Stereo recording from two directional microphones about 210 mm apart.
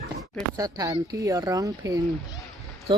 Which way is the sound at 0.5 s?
15° right (ahead or behind).